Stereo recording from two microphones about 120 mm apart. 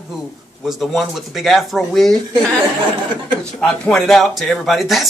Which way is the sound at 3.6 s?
5° left (ahead or behind).